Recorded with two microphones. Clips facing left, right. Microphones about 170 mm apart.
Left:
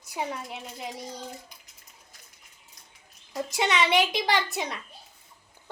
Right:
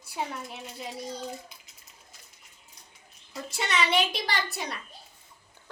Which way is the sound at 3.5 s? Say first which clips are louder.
Left 3 dB; 20° left (ahead or behind).